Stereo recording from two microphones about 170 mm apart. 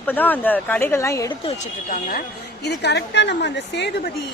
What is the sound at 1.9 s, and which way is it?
A woman's voice, 55° left (ahead or behind).